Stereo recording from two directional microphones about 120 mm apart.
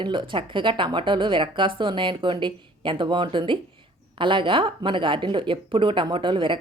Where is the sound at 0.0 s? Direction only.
40° right (ahead or behind).